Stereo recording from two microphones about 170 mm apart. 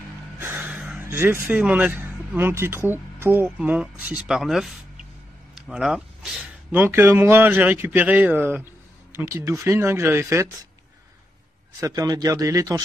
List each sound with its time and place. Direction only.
0.4 s speech: 10° right (ahead or behind)
11.8 s speech: 20° right (ahead or behind)